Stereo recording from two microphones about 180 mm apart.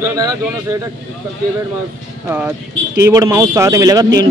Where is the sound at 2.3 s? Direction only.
10° right (ahead or behind).